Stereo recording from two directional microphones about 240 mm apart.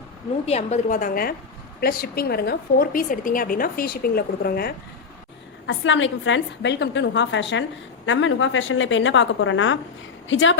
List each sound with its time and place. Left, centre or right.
0.4 s a woman's voice: left
5.6 s a woman's voice: left